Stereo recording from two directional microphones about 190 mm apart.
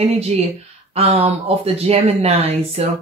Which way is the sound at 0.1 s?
35° right (ahead or behind).